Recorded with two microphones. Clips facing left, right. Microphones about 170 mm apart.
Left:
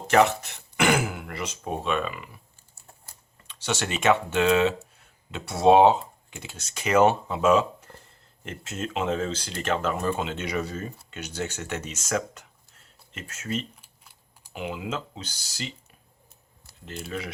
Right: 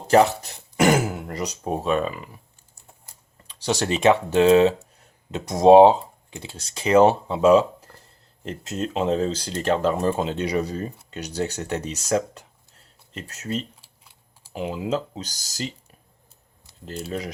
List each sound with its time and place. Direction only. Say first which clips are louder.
0.1 s speech: right 3 dB; 35° right (ahead or behind)
3.4 s speech: right 5 dB; 35° right (ahead or behind)
16.8 s speech: right 4 dB; 35° right (ahead or behind)